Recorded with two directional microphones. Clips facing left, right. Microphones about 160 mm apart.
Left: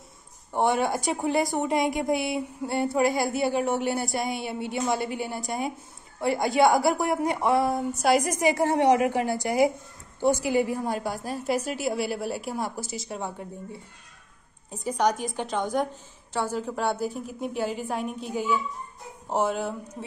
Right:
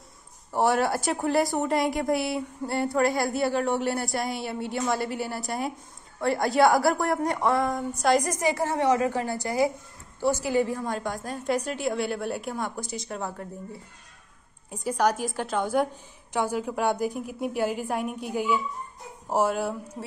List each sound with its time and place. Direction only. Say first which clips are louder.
0.5 s a woman's voice: right 1 dB; 5° right (ahead or behind)
14.7 s a woman's voice: even; 10° right (ahead or behind)